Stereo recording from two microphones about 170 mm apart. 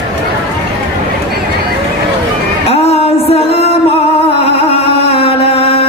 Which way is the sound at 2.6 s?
35° left (ahead or behind).